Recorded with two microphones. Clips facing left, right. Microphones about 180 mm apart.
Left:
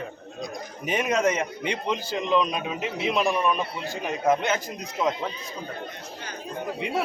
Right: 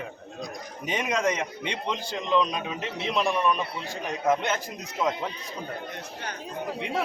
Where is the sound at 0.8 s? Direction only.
5° left (ahead or behind).